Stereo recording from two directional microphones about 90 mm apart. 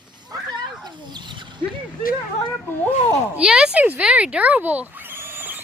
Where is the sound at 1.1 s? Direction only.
60° right (ahead or behind).